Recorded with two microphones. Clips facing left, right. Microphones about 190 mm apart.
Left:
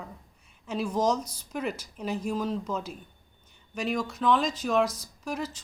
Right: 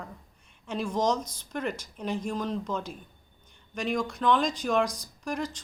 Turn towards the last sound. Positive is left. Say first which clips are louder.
# right 1 dB
turn(degrees=5)  # may be behind; listen again after turning